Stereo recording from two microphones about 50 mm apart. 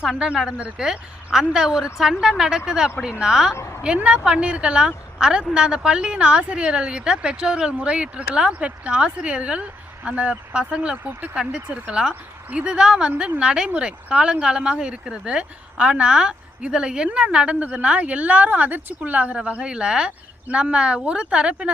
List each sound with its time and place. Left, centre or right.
0.8 s speech: centre
3.5 s a woman's voice: left
3.8 s speech: right
10.9 s a woman's voice: right
11.3 s a woman's voice: centre
19.4 s speech: right